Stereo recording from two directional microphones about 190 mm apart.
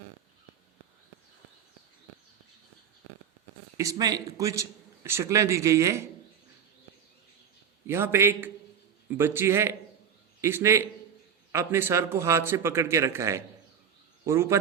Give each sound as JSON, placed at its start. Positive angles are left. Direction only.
{"t": 3.8, "sound": "a man's voice", "side_deg": -20}
{"t": 7.9, "sound": "a man's voice", "side_deg": -15}